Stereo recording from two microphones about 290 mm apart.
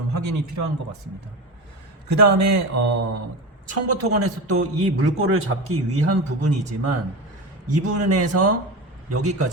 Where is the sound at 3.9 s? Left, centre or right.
Right.